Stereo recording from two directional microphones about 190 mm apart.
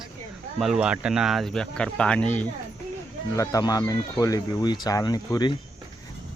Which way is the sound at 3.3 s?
20° left (ahead or behind).